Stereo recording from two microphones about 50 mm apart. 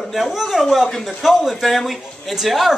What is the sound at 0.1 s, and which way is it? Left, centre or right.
Speech, centre.